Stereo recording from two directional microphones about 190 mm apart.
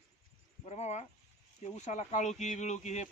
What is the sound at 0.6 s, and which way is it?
Speech, 35° left (ahead or behind).